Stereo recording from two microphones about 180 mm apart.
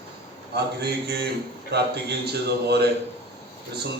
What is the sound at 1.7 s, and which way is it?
Mantra, 65° right (ahead or behind).